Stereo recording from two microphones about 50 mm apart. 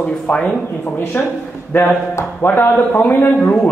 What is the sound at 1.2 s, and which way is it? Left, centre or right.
Speech, left.